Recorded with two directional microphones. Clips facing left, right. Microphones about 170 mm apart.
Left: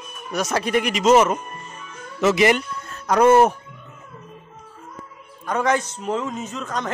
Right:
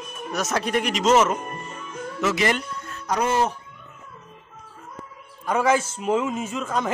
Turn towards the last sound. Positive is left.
turn(degrees=-10)  # may be behind; listen again after turning